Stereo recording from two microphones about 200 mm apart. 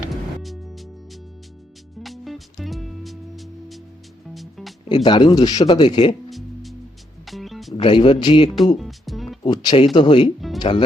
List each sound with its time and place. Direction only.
0.4 s music: centre (ahead or behind)
2.0 s music: centre (ahead or behind)
5.0 s speech: 20° left (ahead or behind)
6.3 s music: centre (ahead or behind)
7.7 s speech: 25° left (ahead or behind)
8.8 s music: centre (ahead or behind)
9.4 s speech: 20° left (ahead or behind)